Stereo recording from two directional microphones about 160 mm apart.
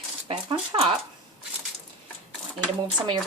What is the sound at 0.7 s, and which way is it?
Speech, 30° right (ahead or behind).